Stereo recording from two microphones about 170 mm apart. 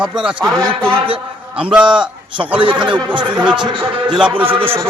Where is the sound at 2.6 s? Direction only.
30° right (ahead or behind).